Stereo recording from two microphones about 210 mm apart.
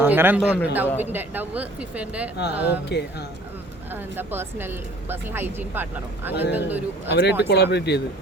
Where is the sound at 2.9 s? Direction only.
50° left (ahead or behind).